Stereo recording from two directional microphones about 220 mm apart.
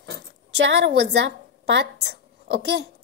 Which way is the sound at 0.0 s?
55° right (ahead or behind).